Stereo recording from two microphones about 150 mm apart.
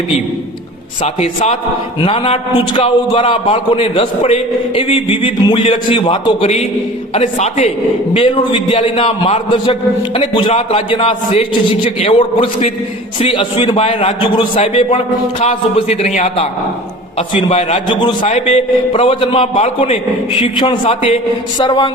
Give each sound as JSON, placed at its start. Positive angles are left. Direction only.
{"t": 1.0, "sound": "a man's voice", "side_deg": 45}
{"t": 8.1, "sound": "a man's voice", "side_deg": 35}
{"t": 17.5, "sound": "a man's voice", "side_deg": 45}
{"t": 18.3, "sound": "a man's voice", "side_deg": 45}
{"t": 20.4, "sound": "a man's voice", "side_deg": 35}
{"t": 21.6, "sound": "a sound", "side_deg": 30}